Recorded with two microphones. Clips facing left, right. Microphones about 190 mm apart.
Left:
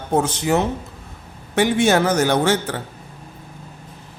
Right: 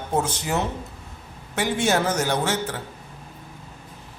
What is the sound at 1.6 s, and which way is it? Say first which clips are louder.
A woman's voice: left 6 dB; 65° left (ahead or behind).